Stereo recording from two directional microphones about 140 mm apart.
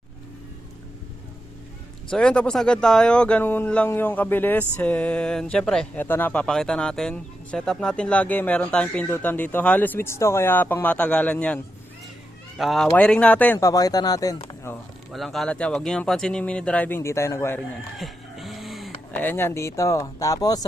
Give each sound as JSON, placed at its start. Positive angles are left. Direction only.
{"t": 2.0, "sound": "speech", "side_deg": 5}
{"t": 13.6, "sound": "speech", "side_deg": 25}
{"t": 14.4, "sound": "a sound", "side_deg": 15}
{"t": 15.1, "sound": "speech", "side_deg": 0}
{"t": 17.9, "sound": "music", "side_deg": 0}
{"t": 19.1, "sound": "speech", "side_deg": 15}